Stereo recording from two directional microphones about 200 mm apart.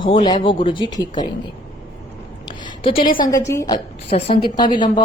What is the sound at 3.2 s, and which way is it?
Speech, 15° left (ahead or behind).